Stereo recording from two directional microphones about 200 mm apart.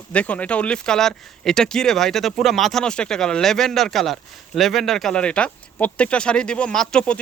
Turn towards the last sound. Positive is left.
turn(degrees=5)  # may be behind; listen again after turning